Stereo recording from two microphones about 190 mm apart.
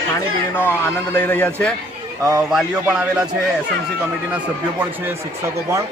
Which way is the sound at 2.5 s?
5° right (ahead or behind).